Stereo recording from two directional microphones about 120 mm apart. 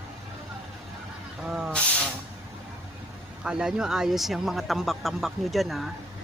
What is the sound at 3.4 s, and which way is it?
Speech, 5° right (ahead or behind).